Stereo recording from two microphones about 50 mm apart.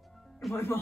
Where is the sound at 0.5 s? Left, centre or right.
Left.